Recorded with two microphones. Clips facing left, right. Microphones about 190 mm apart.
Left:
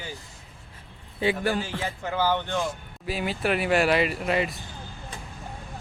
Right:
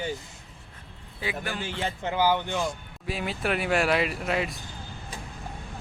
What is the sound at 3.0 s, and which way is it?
Speech, centre (ahead or behind).